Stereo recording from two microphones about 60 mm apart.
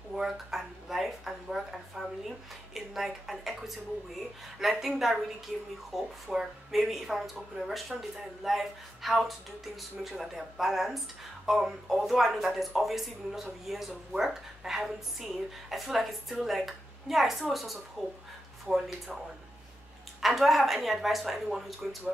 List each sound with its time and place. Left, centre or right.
0.1 s a sound: centre
2.7 s speech: centre
20.2 s speech: centre